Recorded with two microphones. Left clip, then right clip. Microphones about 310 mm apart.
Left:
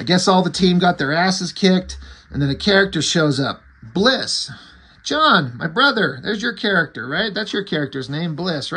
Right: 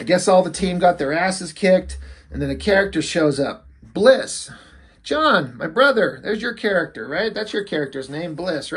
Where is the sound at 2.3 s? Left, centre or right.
Left.